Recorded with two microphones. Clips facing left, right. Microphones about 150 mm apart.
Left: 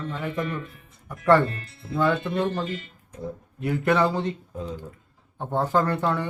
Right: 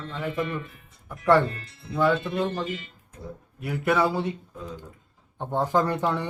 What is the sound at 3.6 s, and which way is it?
Speech, 5° right (ahead or behind).